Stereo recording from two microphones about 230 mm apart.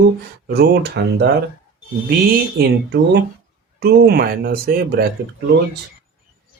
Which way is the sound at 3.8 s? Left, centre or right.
Right.